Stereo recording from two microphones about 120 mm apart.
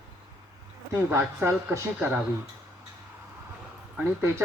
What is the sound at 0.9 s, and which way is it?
Speech, 20° right (ahead or behind).